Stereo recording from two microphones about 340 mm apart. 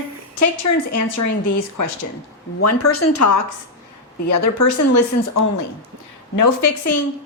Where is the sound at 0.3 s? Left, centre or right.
Left.